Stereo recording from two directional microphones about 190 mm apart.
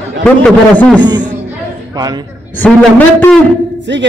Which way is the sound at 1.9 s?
20° right (ahead or behind).